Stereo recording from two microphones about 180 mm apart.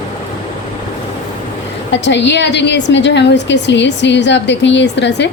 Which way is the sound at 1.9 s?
75° left (ahead or behind).